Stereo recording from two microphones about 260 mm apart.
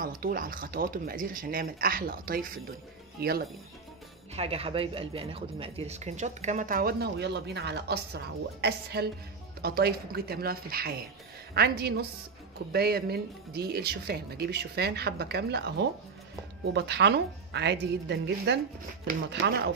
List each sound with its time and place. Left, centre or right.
0.0 s speech: right
4.4 s a woman's voice: right